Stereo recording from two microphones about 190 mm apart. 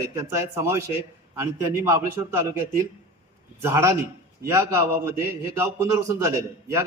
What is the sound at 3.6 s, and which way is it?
A man's voice, 15° right (ahead or behind).